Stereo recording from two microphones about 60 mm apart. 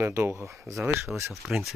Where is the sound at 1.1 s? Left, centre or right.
Centre.